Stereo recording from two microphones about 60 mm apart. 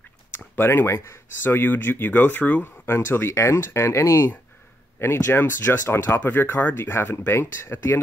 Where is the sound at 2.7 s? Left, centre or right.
Left.